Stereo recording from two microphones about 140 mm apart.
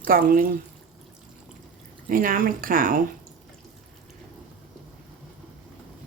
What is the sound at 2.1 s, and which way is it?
Speech, 85° right.